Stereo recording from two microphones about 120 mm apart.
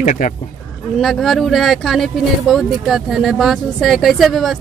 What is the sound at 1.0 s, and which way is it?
Speech, centre (ahead or behind).